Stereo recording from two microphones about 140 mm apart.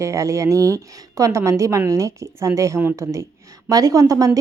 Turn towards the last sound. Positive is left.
turn(degrees=-25)  # may be behind; listen again after turning